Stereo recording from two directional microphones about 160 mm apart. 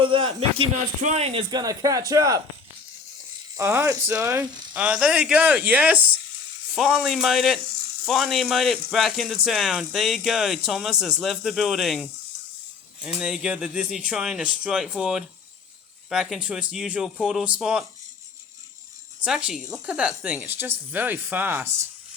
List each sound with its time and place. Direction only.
0.0 s speech: 35° right (ahead or behind)
3.6 s speech: 15° right (ahead or behind)
19.2 s speech: 5° right (ahead or behind)